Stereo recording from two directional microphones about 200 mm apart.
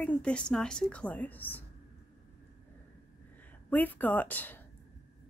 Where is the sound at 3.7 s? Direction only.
10° left (ahead or behind).